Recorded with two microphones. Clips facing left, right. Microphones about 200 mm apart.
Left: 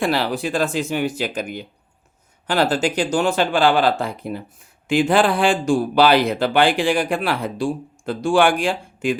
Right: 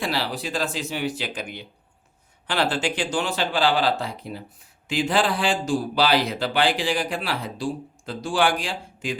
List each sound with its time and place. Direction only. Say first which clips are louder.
0.0 s a man's voice: left 6 dB; 50° left (ahead or behind)